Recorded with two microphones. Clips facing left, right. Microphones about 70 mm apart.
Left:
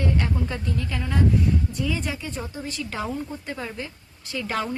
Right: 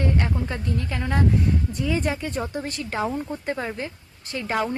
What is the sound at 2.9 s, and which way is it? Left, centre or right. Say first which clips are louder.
A woman's voice: right 5 dB; right.